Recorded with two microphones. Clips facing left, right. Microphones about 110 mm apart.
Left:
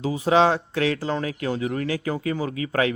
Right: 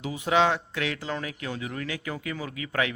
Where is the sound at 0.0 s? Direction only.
35° left (ahead or behind).